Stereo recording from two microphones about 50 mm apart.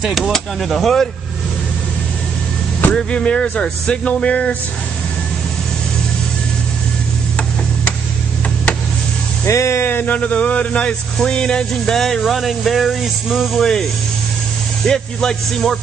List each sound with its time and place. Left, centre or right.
0.0 s speech: centre
2.9 s speech: centre
9.5 s speech: left
9.8 s a sound: left
10.1 s speech: left; by 13.5 s centre
13.6 s speech: centre
14.9 s speech: centre